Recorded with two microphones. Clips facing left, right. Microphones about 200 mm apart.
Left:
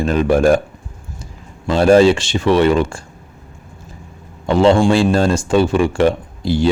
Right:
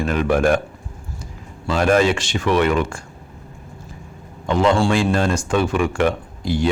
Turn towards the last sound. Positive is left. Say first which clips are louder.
# left 4 dB
turn(degrees=30)  # may be behind; listen again after turning